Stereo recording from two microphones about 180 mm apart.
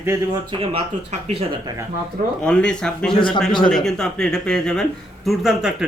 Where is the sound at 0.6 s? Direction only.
30° right (ahead or behind).